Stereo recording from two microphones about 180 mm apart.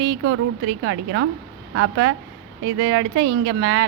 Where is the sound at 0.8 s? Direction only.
90° right.